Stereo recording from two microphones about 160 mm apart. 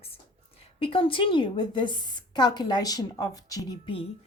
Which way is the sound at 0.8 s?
35° left (ahead or behind).